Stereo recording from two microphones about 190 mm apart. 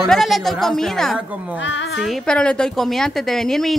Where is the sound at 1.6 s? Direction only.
70° left (ahead or behind).